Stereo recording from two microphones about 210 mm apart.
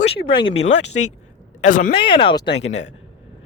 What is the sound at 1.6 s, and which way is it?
Speech, 40° left (ahead or behind).